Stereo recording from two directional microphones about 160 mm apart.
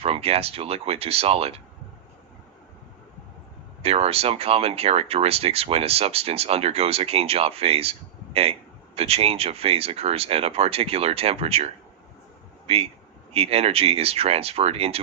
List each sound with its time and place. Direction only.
0.0 s speech: 40° right (ahead or behind)
3.8 s speech: 40° right (ahead or behind)